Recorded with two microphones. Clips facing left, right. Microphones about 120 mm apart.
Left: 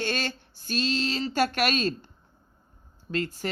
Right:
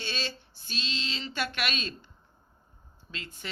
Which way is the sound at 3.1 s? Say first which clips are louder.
Left 13 dB; 45° left (ahead or behind).